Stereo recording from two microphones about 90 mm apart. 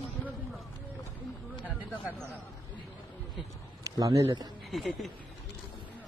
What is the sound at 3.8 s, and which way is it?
Speech, 35° right (ahead or behind).